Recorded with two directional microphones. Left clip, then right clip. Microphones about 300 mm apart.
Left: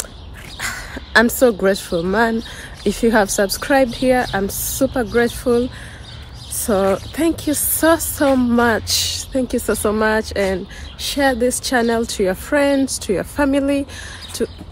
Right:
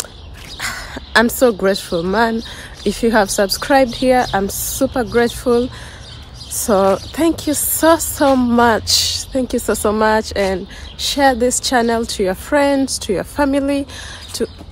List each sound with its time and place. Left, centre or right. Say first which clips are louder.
0.6 s speech: right 1 dB; centre
6.6 s speech: right 3 dB; centre
14.3 s a sound: right 1 dB; centre